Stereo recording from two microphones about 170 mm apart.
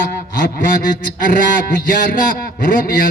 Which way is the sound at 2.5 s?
55° left (ahead or behind).